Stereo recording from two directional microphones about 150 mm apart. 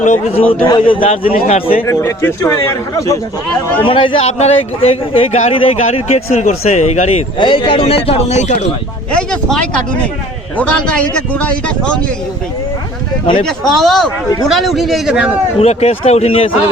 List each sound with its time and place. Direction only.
0.0 s a man's voice: 55° left (ahead or behind)
0.6 s a man's voice: 35° left (ahead or behind)
1.9 s speech: 15° left (ahead or behind)
3.8 s a man's voice: 35° left (ahead or behind)
7.3 s a man's voice: 35° left (ahead or behind); by 8.6 s 50° left (ahead or behind)
9.1 s a man's voice: 5° left (ahead or behind)
13.4 s a man's voice: centre (ahead or behind)
15.6 s a man's voice: 45° left (ahead or behind)